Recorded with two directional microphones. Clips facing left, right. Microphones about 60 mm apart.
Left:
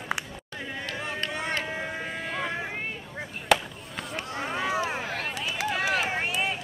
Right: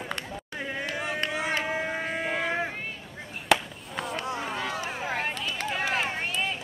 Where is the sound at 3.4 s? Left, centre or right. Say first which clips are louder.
Even; centre.